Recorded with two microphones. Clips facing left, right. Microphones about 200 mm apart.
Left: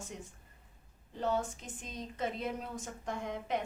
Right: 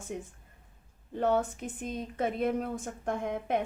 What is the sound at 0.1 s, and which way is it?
A woman's voice, 55° right (ahead or behind).